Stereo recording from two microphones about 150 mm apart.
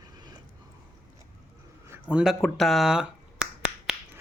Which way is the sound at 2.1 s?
5° right (ahead or behind).